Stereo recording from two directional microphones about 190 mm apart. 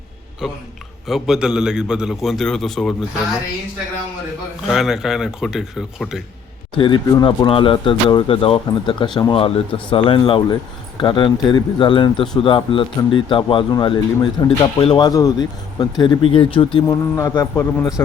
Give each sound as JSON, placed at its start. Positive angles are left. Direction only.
{"t": 0.4, "sound": "a man's voice", "side_deg": 0}
{"t": 4.6, "sound": "a man's voice", "side_deg": 0}
{"t": 6.7, "sound": "speech", "side_deg": 25}
{"t": 16.8, "sound": "a man's voice", "side_deg": 15}